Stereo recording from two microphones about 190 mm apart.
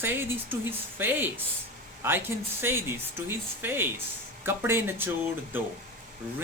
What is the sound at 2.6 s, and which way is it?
Speech, 10° right (ahead or behind).